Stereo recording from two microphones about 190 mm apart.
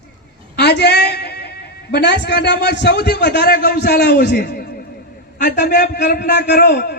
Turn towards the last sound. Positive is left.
turn(degrees=55)  # may be behind; listen again after turning